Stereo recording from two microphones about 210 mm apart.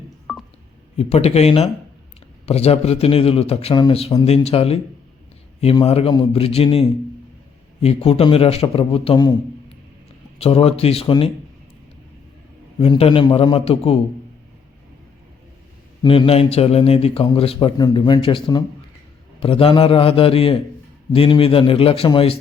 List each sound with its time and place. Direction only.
0.9 s speech: 30° left (ahead or behind)
10.3 s speech: 25° left (ahead or behind)
12.8 s speech: 25° left (ahead or behind)
16.0 s speech: 25° left (ahead or behind)